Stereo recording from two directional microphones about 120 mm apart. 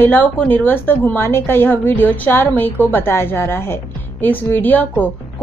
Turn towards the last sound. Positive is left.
turn(degrees=15)  # may be behind; listen again after turning